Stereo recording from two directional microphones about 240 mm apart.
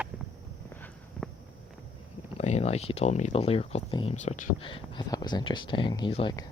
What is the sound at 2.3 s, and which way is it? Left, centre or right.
Speech, left.